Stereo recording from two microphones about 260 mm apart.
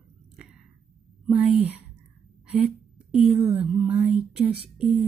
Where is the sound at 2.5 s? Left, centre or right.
Centre.